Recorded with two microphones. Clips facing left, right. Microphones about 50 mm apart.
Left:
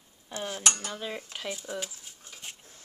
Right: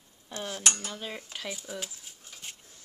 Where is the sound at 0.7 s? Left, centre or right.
Left.